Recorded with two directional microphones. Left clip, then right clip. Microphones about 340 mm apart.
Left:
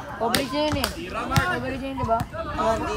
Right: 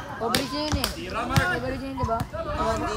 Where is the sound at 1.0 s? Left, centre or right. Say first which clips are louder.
Right 1 dB; centre.